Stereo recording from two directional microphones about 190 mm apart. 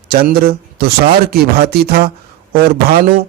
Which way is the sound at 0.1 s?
55° right (ahead or behind).